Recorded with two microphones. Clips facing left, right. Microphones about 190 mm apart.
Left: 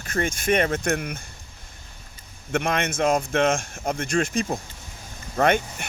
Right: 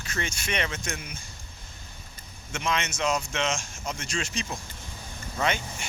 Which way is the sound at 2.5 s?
55° left (ahead or behind).